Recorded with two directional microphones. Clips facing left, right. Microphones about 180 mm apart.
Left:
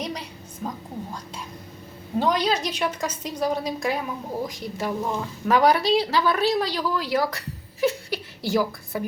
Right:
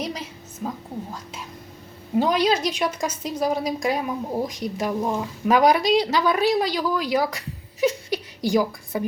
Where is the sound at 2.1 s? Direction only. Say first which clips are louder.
Right 3 dB; 10° right (ahead or behind).